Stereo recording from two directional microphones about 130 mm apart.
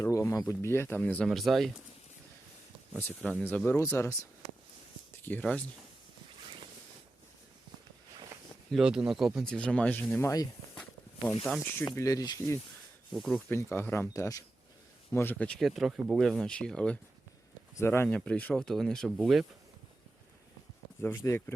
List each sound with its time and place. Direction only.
0.0 s speech: 25° left (ahead or behind)
1.3 s speech: centre (ahead or behind)
3.4 s speech: 15° left (ahead or behind)
5.2 s speech: 10° left (ahead or behind)
8.7 s speech: 5° right (ahead or behind); by 10.5 s 25° left (ahead or behind)
10.8 s walk: 10° left (ahead or behind)
11.6 s speech: 15° left (ahead or behind)
11.9 s speech: 25° left (ahead or behind)
13.1 s speech: centre (ahead or behind)
13.5 s speech: 20° left (ahead or behind)
15.6 s speech: centre (ahead or behind)
17.7 s speech: 20° left (ahead or behind); by 19.5 s centre (ahead or behind)
21.2 s speech: 20° left (ahead or behind)